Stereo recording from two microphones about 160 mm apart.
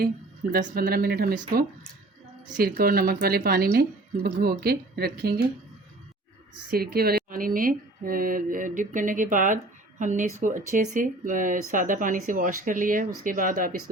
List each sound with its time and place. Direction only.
0.5 s speech: 65° right (ahead or behind)
6.7 s speech: 70° right (ahead or behind)